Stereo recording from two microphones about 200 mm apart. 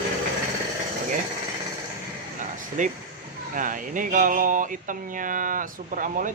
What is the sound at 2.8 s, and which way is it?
Speech, 40° right (ahead or behind).